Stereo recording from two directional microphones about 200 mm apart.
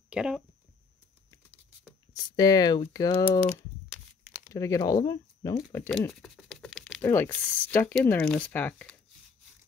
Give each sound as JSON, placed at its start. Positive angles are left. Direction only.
{"t": 0.1, "sound": "speech", "side_deg": -5}
{"t": 2.3, "sound": "speech", "side_deg": 20}
{"t": 3.9, "sound": "crumpling", "side_deg": -5}
{"t": 4.6, "sound": "speech", "side_deg": 15}
{"t": 7.0, "sound": "speech", "side_deg": 10}